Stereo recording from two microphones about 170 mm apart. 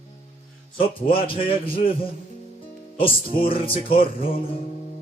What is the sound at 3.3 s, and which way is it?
Music, 35° left (ahead or behind).